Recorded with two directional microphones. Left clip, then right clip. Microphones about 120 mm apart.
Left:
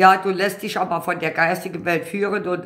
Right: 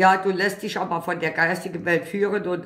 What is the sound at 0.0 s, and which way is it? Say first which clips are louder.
Speech: left 3 dB; 30° left (ahead or behind).